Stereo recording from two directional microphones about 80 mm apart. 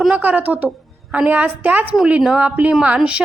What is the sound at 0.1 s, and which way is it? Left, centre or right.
A woman's voice, right.